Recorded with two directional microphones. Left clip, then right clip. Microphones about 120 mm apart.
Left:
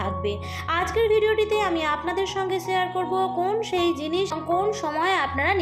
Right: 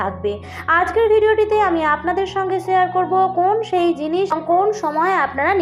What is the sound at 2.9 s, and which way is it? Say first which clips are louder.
A woman's voice: right 8 dB; 20° left (ahead or behind).